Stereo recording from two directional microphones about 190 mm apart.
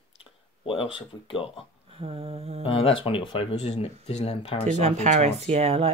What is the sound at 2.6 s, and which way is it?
Speech, 30° left (ahead or behind).